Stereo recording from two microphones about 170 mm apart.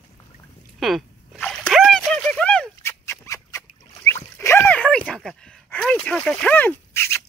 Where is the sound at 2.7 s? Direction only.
15° left (ahead or behind).